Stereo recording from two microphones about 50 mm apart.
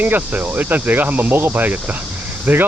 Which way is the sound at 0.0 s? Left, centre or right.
Right.